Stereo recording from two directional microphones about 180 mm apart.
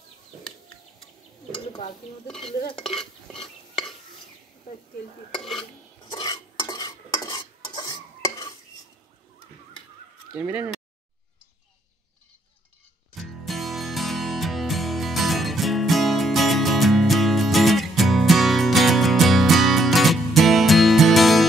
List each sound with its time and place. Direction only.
2.4 s stir: 25° left (ahead or behind)
5.6 s stir: 25° left (ahead or behind)
10.3 s speech: 10° right (ahead or behind)
13.1 s music: centre (ahead or behind)